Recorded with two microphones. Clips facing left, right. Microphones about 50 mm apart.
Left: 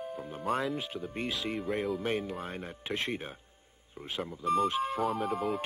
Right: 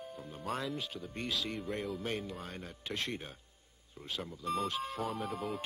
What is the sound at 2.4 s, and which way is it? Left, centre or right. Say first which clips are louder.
Speech: left 5 dB; left.